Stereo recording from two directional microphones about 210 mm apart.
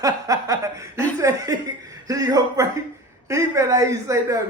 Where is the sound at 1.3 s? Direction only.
15° right (ahead or behind).